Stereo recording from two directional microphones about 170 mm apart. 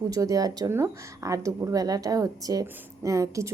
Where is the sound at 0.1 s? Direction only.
20° right (ahead or behind).